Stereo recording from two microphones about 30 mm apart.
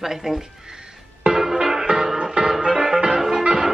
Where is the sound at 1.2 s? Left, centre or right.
Right.